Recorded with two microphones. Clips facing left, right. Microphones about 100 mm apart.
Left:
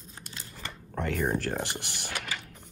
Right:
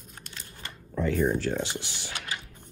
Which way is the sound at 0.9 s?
65° left (ahead or behind).